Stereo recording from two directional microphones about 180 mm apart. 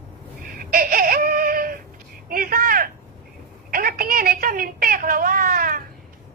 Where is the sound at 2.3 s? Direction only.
55° right (ahead or behind).